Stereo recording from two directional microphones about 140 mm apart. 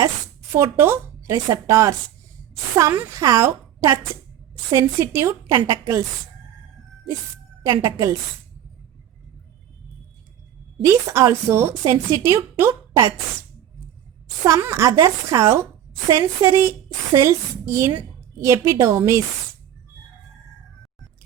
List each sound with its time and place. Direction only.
0.8 s a woman's voice: 20° right (ahead or behind)
7.7 s a woman's voice: 30° right (ahead or behind)
10.8 s a woman's voice: 20° right (ahead or behind)
14.4 s a woman's voice: 20° right (ahead or behind)